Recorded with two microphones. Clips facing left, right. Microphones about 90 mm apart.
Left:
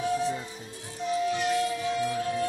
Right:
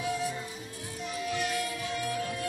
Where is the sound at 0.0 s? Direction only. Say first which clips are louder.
Left 4 dB; 30° left (ahead or behind).